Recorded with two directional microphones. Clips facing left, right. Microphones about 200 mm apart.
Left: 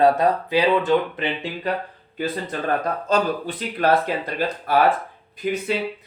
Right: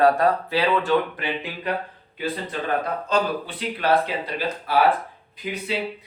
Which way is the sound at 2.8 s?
45° left (ahead or behind).